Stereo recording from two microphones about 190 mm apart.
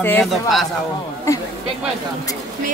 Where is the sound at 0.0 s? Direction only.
10° left (ahead or behind).